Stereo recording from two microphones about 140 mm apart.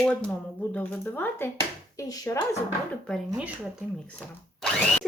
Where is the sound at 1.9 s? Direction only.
25° left (ahead or behind).